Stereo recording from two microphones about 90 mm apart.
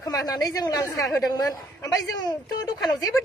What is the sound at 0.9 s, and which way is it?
Speech, 35° left (ahead or behind).